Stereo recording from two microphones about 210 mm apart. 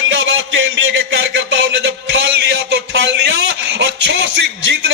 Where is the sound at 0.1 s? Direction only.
65° right (ahead or behind).